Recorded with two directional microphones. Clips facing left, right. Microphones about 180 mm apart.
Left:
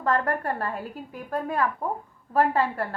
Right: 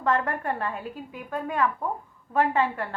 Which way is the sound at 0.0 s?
35° left (ahead or behind).